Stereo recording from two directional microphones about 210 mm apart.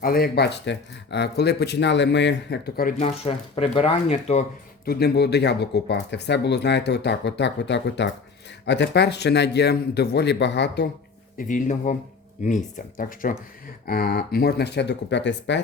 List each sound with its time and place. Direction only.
0.0 s speech: 45° left (ahead or behind)
3.0 s speech: 30° left (ahead or behind)
4.9 s speech: 50° left (ahead or behind)
11.3 s speech: 40° left (ahead or behind); by 15.6 s 60° left (ahead or behind)